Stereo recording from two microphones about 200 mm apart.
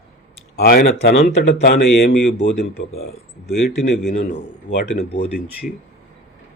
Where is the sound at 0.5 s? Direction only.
50° left (ahead or behind).